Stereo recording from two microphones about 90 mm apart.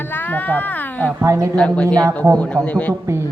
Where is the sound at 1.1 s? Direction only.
35° right (ahead or behind).